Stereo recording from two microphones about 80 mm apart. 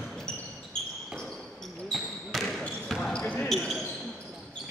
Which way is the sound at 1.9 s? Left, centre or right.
Centre.